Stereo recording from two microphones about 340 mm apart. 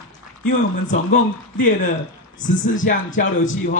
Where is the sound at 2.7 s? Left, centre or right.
Left.